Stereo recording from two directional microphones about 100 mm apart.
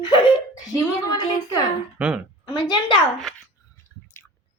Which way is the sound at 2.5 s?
50° left (ahead or behind).